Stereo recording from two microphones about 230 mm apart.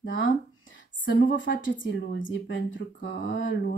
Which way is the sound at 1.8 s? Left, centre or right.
Left.